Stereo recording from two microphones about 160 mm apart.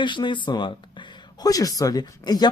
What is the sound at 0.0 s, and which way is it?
A woman's voice, 30° left (ahead or behind).